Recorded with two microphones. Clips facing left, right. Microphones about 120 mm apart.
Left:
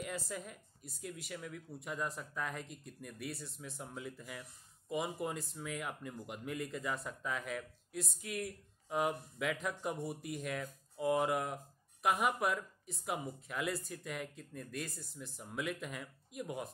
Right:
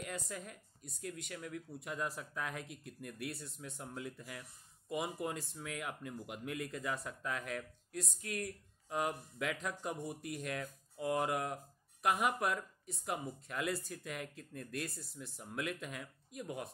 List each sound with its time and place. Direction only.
0.0 s speech: centre (ahead or behind)